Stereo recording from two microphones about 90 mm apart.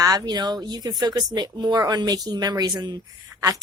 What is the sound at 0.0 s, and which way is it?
Speech, 45° right (ahead or behind).